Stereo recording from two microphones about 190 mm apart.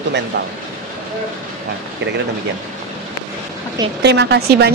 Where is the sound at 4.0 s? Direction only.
65° right (ahead or behind).